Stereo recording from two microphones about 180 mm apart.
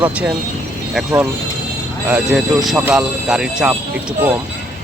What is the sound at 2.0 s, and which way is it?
Speech, 5° right (ahead or behind).